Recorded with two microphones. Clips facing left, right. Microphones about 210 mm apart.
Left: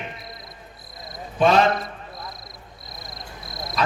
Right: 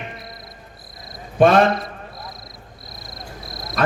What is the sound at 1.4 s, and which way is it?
Speech, 55° right (ahead or behind).